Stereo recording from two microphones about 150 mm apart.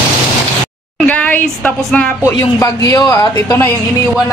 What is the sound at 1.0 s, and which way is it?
A woman's voice, 10° left (ahead or behind).